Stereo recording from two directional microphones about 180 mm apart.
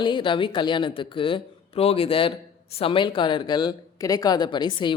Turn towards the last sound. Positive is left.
turn(degrees=25)  # may be behind; listen again after turning